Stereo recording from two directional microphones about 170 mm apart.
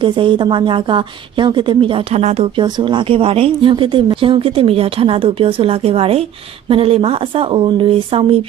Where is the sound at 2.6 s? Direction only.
25° right (ahead or behind).